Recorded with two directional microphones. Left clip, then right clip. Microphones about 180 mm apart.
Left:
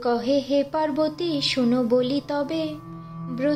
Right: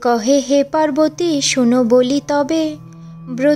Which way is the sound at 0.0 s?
50° right (ahead or behind).